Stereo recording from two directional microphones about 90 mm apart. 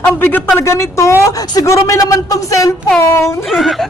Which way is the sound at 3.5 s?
Centre (ahead or behind).